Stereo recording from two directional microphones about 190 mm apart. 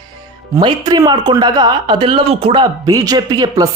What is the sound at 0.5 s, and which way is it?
Speech, 20° right (ahead or behind).